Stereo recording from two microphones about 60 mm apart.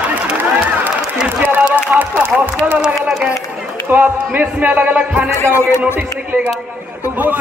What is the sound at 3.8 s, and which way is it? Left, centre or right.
Speech, right.